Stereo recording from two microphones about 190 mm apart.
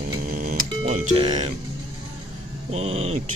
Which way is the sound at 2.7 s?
35° right (ahead or behind).